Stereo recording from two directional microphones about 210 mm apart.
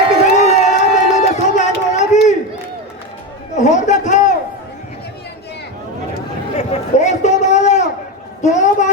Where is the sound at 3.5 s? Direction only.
35° left (ahead or behind).